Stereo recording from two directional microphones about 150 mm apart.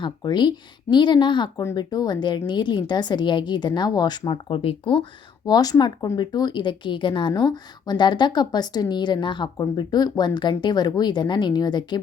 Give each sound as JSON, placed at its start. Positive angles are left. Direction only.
{"t": 0.0, "sound": "a woman's voice", "side_deg": 30}
{"t": 5.5, "sound": "a woman's voice", "side_deg": 25}